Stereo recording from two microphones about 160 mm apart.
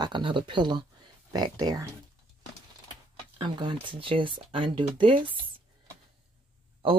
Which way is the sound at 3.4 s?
30° right (ahead or behind).